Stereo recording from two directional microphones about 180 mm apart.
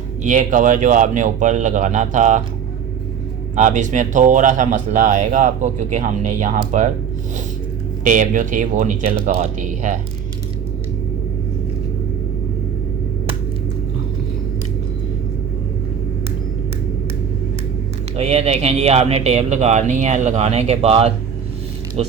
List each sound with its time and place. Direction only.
0.2 s speech: 45° right (ahead or behind)
3.5 s speech: 45° right (ahead or behind)
8.0 s speech: 45° right (ahead or behind)
18.2 s speech: 35° right (ahead or behind)